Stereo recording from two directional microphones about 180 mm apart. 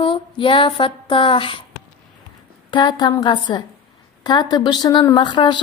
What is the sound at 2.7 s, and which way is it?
A woman's voice, 25° left (ahead or behind).